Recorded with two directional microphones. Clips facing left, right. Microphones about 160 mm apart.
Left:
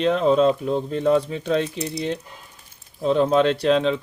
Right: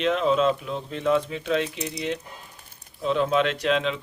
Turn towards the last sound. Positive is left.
turn(degrees=35)  # may be behind; listen again after turning